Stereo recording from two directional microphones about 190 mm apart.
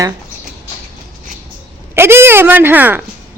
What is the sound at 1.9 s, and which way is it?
Speech, 10° right (ahead or behind).